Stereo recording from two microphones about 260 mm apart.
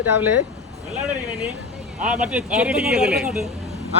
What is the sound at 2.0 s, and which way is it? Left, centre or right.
Speech, centre.